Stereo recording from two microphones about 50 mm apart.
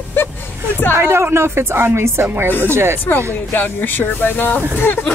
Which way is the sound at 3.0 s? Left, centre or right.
Left.